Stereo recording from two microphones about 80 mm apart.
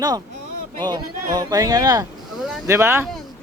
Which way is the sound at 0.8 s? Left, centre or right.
Right.